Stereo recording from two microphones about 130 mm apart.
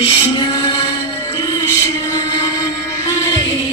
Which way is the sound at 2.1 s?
35° left (ahead or behind).